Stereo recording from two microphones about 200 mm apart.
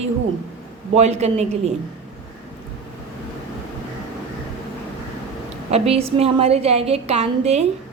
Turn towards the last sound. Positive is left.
turn(degrees=-30)  # may be behind; listen again after turning